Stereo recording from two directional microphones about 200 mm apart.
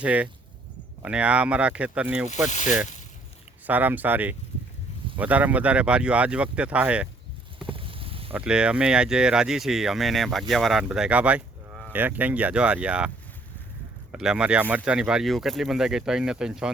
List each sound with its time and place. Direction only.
0.0 s speech: 5° right (ahead or behind)
2.3 s speech: 35° left (ahead or behind)
3.7 s speech: 10° right (ahead or behind)
7.6 s a sound: 25° right (ahead or behind)
8.3 s speech: 5° right (ahead or behind)
14.1 s speech: 5° right (ahead or behind)